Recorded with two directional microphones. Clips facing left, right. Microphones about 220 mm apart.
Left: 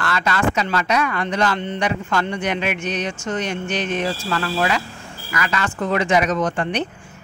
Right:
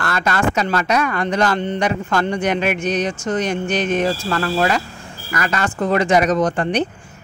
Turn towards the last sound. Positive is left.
turn(degrees=-35)  # may be behind; listen again after turning